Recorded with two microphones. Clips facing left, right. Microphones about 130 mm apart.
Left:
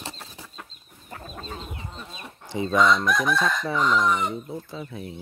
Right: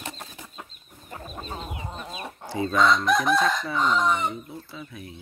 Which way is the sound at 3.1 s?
25° right (ahead or behind).